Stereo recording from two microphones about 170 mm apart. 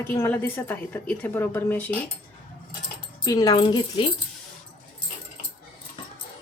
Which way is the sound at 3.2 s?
25° left (ahead or behind).